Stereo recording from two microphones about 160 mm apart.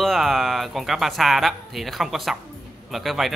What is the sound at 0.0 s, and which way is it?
Speech, centre (ahead or behind).